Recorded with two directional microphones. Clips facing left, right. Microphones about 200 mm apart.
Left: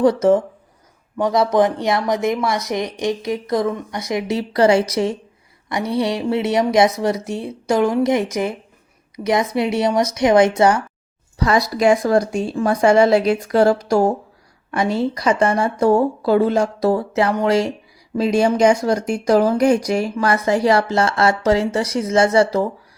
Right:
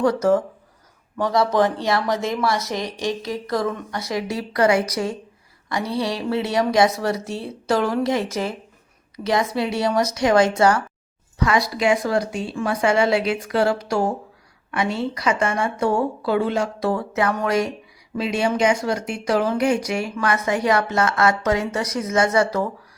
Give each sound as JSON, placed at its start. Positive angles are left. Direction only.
{"t": 0.0, "sound": "speech", "side_deg": 20}
{"t": 11.3, "sound": "speech", "side_deg": 40}
{"t": 18.2, "sound": "speech", "side_deg": 40}